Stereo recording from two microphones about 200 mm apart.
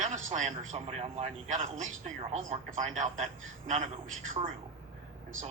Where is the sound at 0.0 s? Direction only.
35° right (ahead or behind).